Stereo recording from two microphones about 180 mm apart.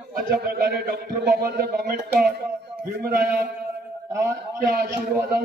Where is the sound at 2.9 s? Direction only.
55° right (ahead or behind).